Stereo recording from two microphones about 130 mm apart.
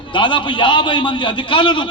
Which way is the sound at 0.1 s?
40° left (ahead or behind).